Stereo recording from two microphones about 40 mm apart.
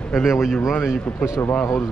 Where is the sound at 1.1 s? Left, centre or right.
Left.